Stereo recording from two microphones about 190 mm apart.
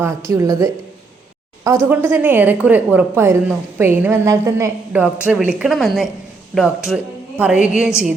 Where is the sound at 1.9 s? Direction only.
10° right (ahead or behind).